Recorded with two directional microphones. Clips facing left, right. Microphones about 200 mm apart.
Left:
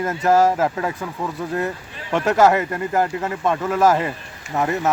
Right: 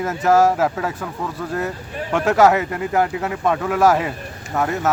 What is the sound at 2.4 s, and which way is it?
Speech, 5° right (ahead or behind).